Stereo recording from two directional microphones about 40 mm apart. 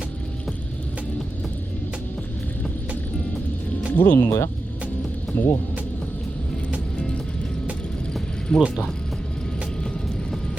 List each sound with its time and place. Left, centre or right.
3.9 s speech: left
8.5 s speech: left